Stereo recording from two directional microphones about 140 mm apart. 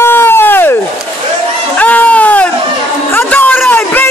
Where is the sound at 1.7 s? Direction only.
10° left (ahead or behind).